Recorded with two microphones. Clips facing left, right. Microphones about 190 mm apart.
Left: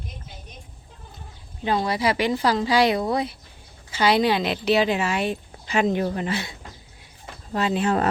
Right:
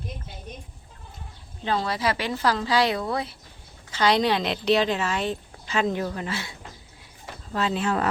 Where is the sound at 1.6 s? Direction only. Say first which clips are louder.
Left 3 dB; 15° left (ahead or behind).